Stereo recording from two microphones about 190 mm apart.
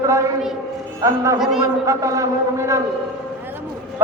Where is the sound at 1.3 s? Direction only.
Centre (ahead or behind).